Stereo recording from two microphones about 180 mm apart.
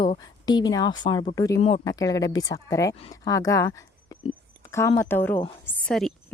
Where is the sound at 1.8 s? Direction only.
20° left (ahead or behind).